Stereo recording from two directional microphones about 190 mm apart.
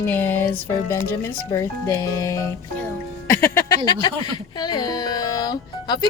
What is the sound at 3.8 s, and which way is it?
Speech, 20° left (ahead or behind).